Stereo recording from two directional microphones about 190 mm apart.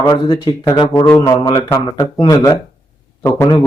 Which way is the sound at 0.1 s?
25° left (ahead or behind).